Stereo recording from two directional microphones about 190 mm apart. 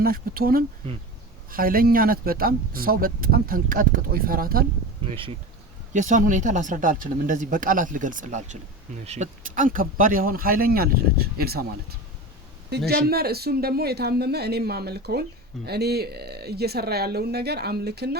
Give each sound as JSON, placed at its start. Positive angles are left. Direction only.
{"t": 0.0, "sound": "speech", "side_deg": -50}
{"t": 5.0, "sound": "speech", "side_deg": -30}
{"t": 5.9, "sound": "speech", "side_deg": -40}